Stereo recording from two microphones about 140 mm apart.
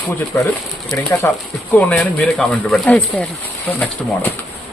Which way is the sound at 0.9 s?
20° left (ahead or behind).